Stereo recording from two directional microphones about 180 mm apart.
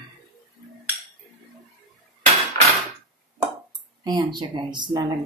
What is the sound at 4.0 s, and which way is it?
A woman's voice, 25° right (ahead or behind).